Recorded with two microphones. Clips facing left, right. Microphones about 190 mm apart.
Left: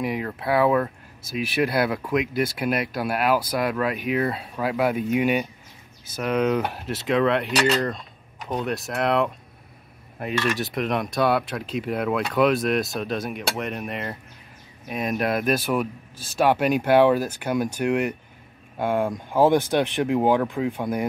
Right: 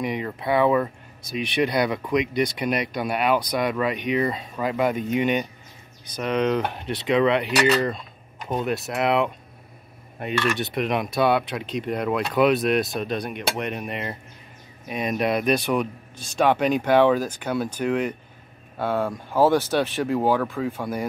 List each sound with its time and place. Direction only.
0.0 s speech: centre (ahead or behind)